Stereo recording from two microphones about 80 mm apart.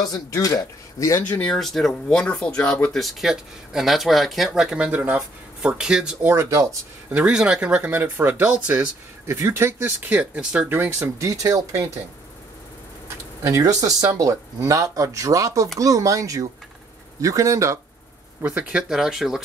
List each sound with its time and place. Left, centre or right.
0.0 s speech: left
1.5 s speech: centre
6.3 s speech: right
7.1 s speech: centre
9.2 s speech: right
10.1 s speech: centre
10.7 s speech: right
13.4 s speech: right
18.4 s speech: centre